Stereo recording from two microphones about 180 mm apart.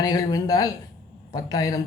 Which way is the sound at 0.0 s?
20° left (ahead or behind).